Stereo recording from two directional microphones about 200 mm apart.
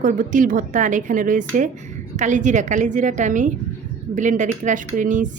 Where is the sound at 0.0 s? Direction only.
40° right (ahead or behind).